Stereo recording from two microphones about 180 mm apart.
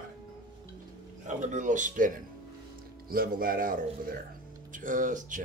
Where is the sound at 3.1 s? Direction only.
55° right (ahead or behind).